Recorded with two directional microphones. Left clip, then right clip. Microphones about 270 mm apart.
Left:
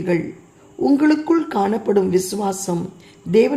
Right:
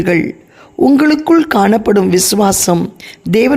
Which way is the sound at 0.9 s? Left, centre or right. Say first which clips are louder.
Right 6 dB; right.